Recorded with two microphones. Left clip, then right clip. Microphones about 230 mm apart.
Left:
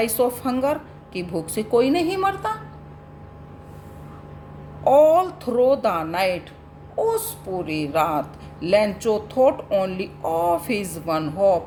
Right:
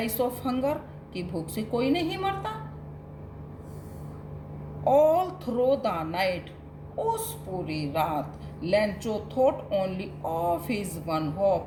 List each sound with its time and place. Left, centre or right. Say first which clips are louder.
0.0 s a woman's voice: left 7 dB; left
4.8 s a woman's voice: left 6 dB; left